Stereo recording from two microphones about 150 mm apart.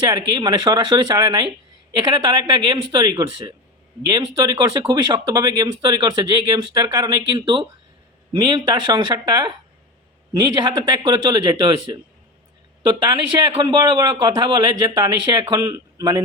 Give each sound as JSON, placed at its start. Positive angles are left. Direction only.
{"t": 0.1, "sound": "speech", "side_deg": -30}
{"t": 13.6, "sound": "speech", "side_deg": -30}